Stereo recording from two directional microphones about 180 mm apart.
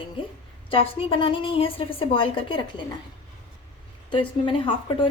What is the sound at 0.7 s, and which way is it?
A woman's voice, 30° left (ahead or behind).